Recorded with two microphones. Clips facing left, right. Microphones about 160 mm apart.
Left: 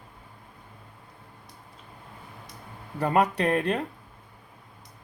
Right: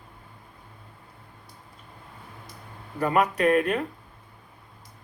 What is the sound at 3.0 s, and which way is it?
Speech, 30° left (ahead or behind).